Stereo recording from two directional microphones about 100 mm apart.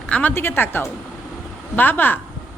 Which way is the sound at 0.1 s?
15° left (ahead or behind).